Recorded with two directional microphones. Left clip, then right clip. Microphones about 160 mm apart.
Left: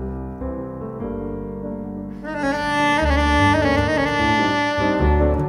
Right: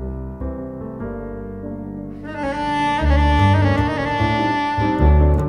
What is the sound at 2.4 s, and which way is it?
Music, 45° left (ahead or behind).